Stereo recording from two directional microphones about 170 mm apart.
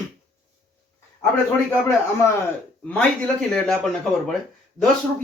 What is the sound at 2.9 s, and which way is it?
Speech, 5° left (ahead or behind).